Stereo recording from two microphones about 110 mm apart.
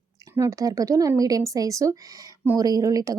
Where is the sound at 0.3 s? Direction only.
30° right (ahead or behind).